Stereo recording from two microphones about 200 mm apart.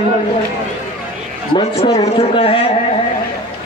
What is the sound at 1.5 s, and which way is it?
A man's voice, 30° left (ahead or behind).